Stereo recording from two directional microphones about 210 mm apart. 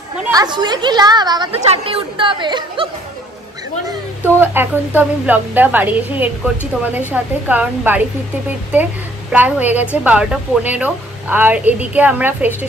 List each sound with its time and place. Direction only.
0.3 s a woman's voice: 20° right (ahead or behind)
4.2 s a woman's voice: 10° right (ahead or behind)
9.3 s a woman's voice: 5° right (ahead or behind)